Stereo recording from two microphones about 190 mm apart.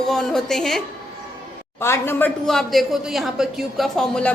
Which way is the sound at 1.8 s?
15° left (ahead or behind).